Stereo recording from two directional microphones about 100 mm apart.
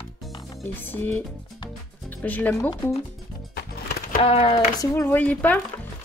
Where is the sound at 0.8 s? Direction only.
20° left (ahead or behind).